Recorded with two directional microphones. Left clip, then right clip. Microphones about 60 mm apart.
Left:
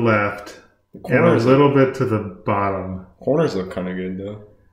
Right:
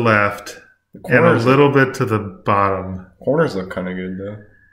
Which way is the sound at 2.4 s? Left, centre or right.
Right.